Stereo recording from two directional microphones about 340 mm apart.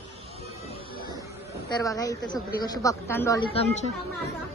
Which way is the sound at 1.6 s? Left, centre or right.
Centre.